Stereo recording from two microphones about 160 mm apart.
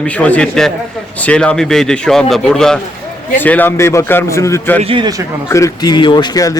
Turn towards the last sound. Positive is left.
turn(degrees=20)  # may be behind; listen again after turning